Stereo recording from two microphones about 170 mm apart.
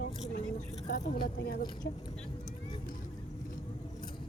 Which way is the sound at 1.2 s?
65° left (ahead or behind).